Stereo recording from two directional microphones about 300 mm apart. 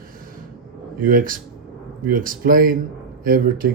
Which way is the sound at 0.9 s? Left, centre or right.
Right.